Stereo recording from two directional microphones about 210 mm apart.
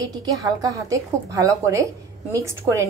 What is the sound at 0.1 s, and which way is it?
A woman's voice, 15° right (ahead or behind).